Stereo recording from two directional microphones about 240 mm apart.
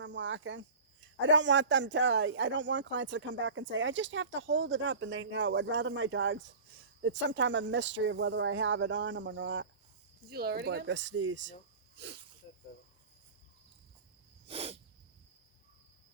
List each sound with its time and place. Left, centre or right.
0.0 s a man's voice: right
14.4 s sneeze: right